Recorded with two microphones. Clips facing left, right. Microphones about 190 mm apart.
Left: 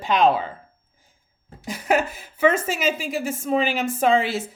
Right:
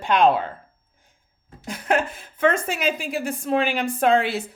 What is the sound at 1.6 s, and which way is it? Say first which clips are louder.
A woman's voice: left 1 dB; 10° left (ahead or behind).